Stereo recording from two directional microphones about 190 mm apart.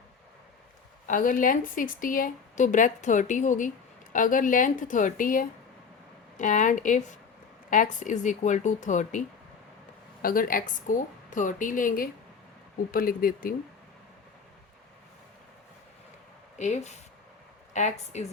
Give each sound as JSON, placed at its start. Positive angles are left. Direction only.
{"t": 1.0, "sound": "a woman's voice", "side_deg": 45}
{"t": 10.2, "sound": "a woman's voice", "side_deg": 50}
{"t": 16.6, "sound": "speech", "side_deg": 40}